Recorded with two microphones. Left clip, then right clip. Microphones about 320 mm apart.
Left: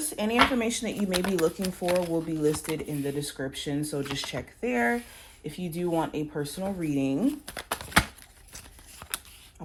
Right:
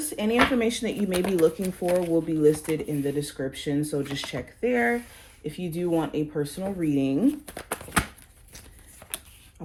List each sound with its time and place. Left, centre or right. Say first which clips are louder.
0.0 s speech: right 1 dB; left
9.6 s speech: right 2 dB; left